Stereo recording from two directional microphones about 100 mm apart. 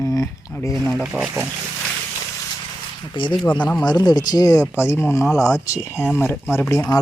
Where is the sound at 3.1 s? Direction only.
55° left (ahead or behind).